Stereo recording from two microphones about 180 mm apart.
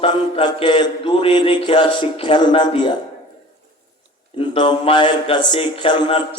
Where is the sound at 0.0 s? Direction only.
25° left (ahead or behind).